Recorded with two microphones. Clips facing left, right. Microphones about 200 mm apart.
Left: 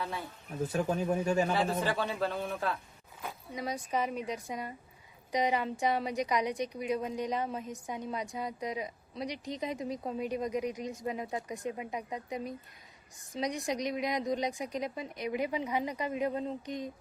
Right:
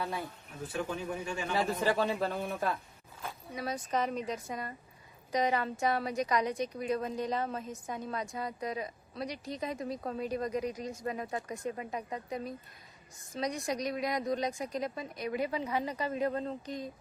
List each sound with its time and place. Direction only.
0.7 s speech: 40° left (ahead or behind)
1.9 s a man's voice: 15° right (ahead or behind)
3.5 s a woman's voice: 15° left (ahead or behind)